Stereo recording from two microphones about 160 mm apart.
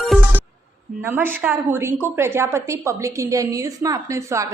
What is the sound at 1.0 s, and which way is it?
A woman's voice, 15° right (ahead or behind).